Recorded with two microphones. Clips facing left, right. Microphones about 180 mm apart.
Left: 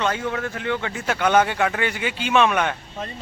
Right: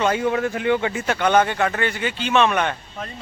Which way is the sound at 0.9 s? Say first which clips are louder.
Right 1 dB; 5° left (ahead or behind).